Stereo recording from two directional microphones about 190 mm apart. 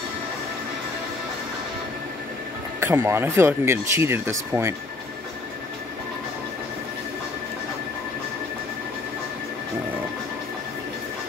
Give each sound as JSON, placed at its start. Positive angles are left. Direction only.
{"t": 2.8, "sound": "speech", "side_deg": -15}